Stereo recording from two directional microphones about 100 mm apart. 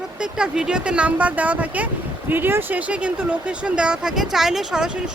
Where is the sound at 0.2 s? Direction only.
10° right (ahead or behind).